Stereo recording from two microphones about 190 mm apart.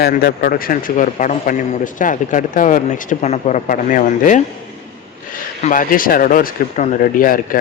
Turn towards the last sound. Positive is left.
turn(degrees=45)  # may be behind; listen again after turning